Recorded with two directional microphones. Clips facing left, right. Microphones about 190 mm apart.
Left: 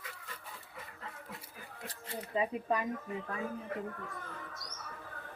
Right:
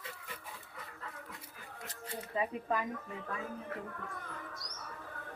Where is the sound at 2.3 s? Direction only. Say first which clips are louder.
Left 2 dB; 25° left (ahead or behind).